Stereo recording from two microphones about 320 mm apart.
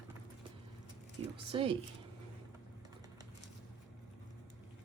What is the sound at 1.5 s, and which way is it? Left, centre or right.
Speech, centre.